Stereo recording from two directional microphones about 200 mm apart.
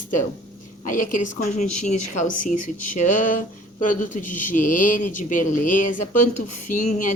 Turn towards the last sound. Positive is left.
turn(degrees=40)  # may be behind; listen again after turning